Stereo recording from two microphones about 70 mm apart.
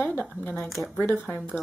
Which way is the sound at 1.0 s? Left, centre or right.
Left.